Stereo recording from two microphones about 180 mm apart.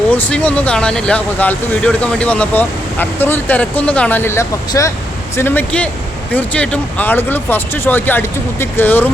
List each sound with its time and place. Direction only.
0.1 s speech: 10° left (ahead or behind)